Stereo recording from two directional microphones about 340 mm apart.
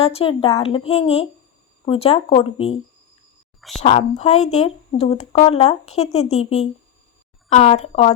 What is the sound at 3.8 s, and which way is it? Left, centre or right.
Speech, centre.